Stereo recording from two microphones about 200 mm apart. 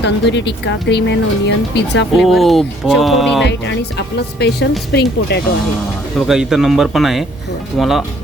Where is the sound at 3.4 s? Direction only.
60° left (ahead or behind).